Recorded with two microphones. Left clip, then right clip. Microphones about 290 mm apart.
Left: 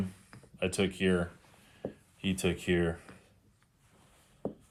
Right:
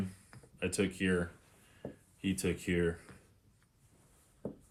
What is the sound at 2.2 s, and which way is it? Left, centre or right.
Speech, centre.